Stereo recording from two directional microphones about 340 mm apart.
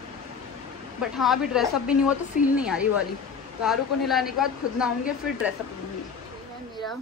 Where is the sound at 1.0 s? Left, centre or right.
Centre.